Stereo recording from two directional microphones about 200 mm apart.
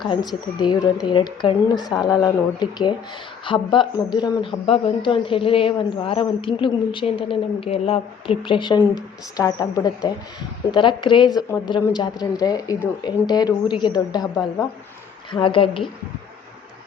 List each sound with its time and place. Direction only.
0.0 s a woman's voice: 20° left (ahead or behind)